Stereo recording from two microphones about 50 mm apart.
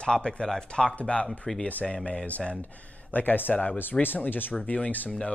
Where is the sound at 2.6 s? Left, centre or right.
Left.